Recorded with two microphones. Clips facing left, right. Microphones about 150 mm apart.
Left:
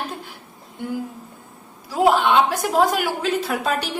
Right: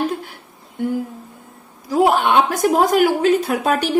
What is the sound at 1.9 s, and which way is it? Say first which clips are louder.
A woman's voice: right 2 dB; 50° right (ahead or behind).